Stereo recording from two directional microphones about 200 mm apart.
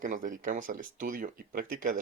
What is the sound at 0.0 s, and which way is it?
Speech, 40° right (ahead or behind).